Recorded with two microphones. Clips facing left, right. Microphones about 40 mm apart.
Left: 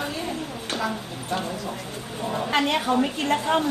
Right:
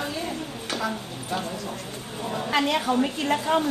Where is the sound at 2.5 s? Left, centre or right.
Left.